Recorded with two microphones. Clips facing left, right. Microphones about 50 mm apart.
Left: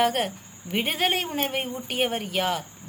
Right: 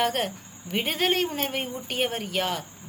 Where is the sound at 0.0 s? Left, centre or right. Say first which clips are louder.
Left 2 dB; centre.